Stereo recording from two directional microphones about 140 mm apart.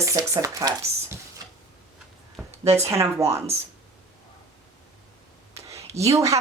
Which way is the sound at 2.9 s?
20° right (ahead or behind).